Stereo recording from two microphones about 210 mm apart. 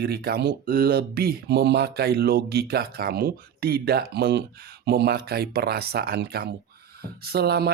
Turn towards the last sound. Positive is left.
turn(degrees=-50)  # may be behind; listen again after turning